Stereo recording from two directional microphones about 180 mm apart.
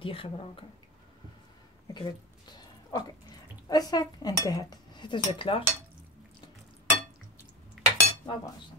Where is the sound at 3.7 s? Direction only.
20° left (ahead or behind).